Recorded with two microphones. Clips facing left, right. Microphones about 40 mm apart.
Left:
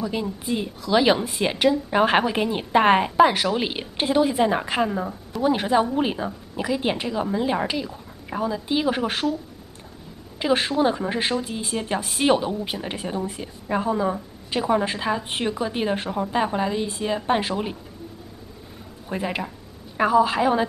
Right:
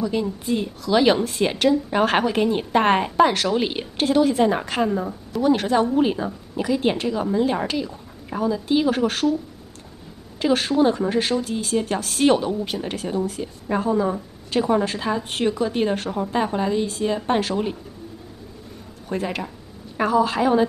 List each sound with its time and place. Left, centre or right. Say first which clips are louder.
0.0 s a woman's voice: right 3 dB; centre
10.4 s a woman's voice: right 2 dB; centre
19.0 s a woman's voice: right 1 dB; centre